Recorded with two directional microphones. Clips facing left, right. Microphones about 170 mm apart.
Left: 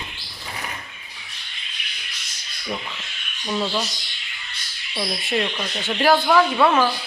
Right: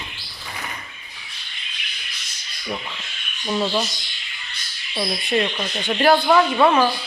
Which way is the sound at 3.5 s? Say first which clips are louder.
Right 2 dB; 15° right (ahead or behind).